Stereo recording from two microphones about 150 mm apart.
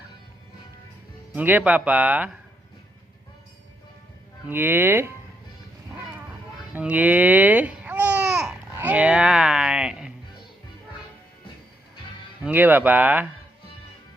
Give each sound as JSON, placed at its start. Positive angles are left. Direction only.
{"t": 1.3, "sound": "speech", "side_deg": -10}
{"t": 4.4, "sound": "speech", "side_deg": -15}
{"t": 6.7, "sound": "speech", "side_deg": -10}
{"t": 12.4, "sound": "speech", "side_deg": -10}